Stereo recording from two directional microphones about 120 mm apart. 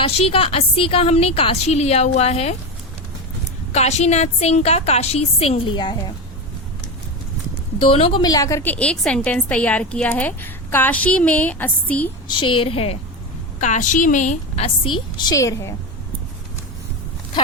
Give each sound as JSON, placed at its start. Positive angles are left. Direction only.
{"t": 0.0, "sound": "a woman's voice", "side_deg": 55}
{"t": 3.7, "sound": "a woman's voice", "side_deg": 65}
{"t": 7.9, "sound": "a woman's voice", "side_deg": 55}
{"t": 8.2, "sound": "a woman's voice", "side_deg": 30}
{"t": 12.3, "sound": "a woman's voice", "side_deg": 45}
{"t": 13.6, "sound": "a woman's voice", "side_deg": 90}
{"t": 15.2, "sound": "a woman's voice", "side_deg": 30}